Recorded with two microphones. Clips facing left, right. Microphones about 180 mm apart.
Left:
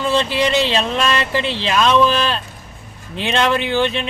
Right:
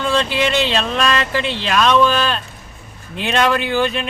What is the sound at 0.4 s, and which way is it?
Speech, centre (ahead or behind).